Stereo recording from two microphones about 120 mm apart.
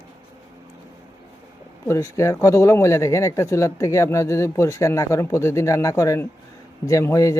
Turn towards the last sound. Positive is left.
turn(degrees=25)  # may be behind; listen again after turning